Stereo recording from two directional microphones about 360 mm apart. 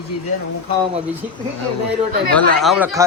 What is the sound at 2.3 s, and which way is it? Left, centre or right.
Speech, centre.